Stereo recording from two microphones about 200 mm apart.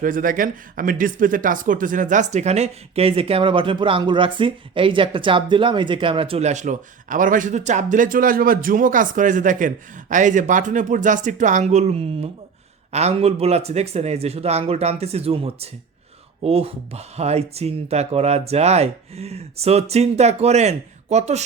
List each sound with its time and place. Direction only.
0.0 s speech: 40° right (ahead or behind)